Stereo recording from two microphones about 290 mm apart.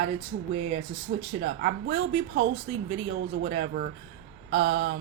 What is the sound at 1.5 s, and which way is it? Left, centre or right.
Speech, right.